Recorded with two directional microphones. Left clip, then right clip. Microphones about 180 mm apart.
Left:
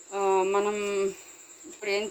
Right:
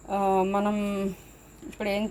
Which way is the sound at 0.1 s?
55° right (ahead or behind).